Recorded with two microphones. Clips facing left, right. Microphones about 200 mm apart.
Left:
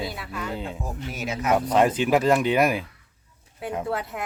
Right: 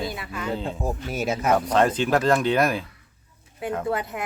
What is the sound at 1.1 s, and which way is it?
Speech, 45° right (ahead or behind).